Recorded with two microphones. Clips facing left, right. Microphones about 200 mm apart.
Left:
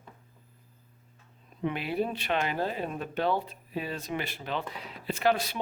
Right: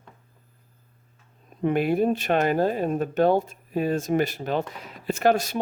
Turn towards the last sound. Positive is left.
turn(degrees=-45)  # may be behind; listen again after turning